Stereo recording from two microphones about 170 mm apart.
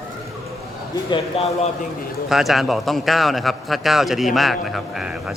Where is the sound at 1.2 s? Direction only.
35° left (ahead or behind).